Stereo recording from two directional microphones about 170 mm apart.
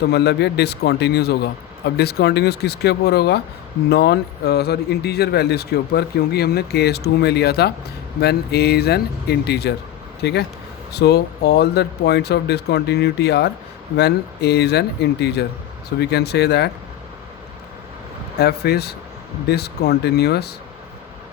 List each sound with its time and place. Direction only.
0.1 s speech: 75° left (ahead or behind)
18.3 s speech: 70° left (ahead or behind)